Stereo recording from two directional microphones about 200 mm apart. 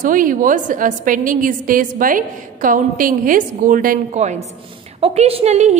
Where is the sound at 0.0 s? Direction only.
40° right (ahead or behind).